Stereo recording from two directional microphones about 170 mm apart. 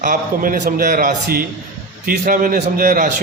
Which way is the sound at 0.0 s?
55° right (ahead or behind).